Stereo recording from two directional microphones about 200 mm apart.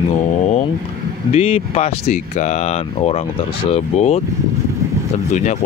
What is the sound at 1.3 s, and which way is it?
Speech, 30° left (ahead or behind).